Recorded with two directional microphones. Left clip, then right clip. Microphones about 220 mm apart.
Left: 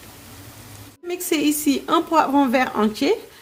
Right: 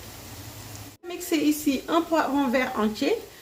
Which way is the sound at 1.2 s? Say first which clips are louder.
Left 3 dB; 45° left (ahead or behind).